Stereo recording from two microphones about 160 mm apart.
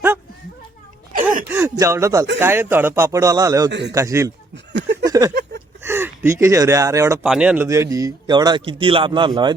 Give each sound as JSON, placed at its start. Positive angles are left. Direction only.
{"t": 1.5, "sound": "a sound", "side_deg": -20}
{"t": 2.4, "sound": "speech", "side_deg": -15}
{"t": 3.7, "sound": "a man's voice", "side_deg": -90}
{"t": 3.9, "sound": "speech", "side_deg": -20}
{"t": 4.5, "sound": "chuckle", "side_deg": -90}
{"t": 5.0, "sound": "a sound", "side_deg": -20}
{"t": 5.3, "sound": "a sound", "side_deg": -90}
{"t": 5.8, "sound": "speech", "side_deg": -15}
{"t": 7.3, "sound": "speech", "side_deg": -5}